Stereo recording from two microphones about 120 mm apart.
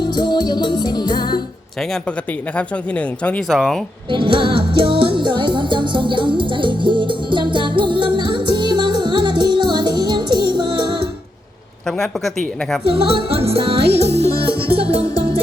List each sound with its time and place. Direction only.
0.0 s music: 35° left (ahead or behind)
2.6 s speech: 10° left (ahead or behind)
3.5 s speech: centre (ahead or behind)
4.1 s music: 45° right (ahead or behind)
11.9 s a woman's voice: 5° left (ahead or behind)
12.8 s music: 50° right (ahead or behind)